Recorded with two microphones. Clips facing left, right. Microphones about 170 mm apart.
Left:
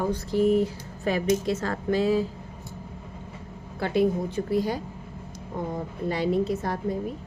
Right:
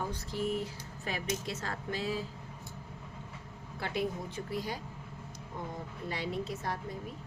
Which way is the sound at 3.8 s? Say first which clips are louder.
Left 11 dB; 35° left (ahead or behind).